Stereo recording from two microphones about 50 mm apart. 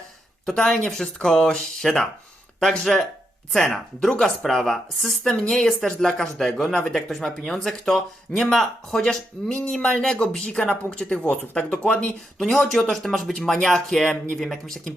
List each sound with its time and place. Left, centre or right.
0.4 s speech: centre
10.4 s speech: left
12.4 s speech: centre